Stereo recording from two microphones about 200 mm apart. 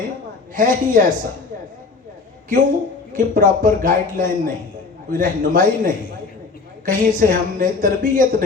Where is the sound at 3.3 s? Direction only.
40° right (ahead or behind).